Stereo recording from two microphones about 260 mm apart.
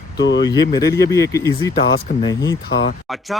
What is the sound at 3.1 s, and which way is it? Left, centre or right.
Speech, centre.